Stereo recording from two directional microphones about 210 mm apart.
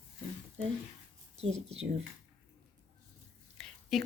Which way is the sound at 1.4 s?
30° right (ahead or behind).